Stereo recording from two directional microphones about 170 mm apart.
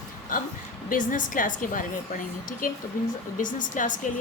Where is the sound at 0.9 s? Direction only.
50° left (ahead or behind).